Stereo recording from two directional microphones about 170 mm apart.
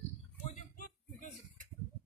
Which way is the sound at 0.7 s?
50° left (ahead or behind).